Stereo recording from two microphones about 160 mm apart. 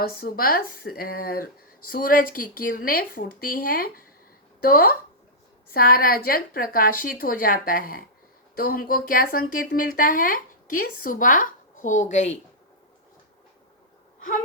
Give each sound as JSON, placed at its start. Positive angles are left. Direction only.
{"t": 0.2, "sound": "speech", "side_deg": 65}